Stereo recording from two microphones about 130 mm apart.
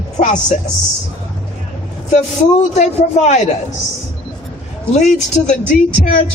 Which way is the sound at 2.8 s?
65° left (ahead or behind).